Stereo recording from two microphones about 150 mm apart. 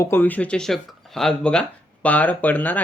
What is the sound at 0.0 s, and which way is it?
Speech, 15° left (ahead or behind).